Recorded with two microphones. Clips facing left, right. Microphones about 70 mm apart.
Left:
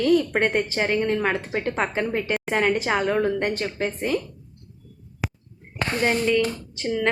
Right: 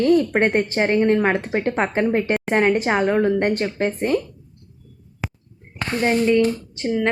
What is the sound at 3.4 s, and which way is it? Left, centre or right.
Speech, right.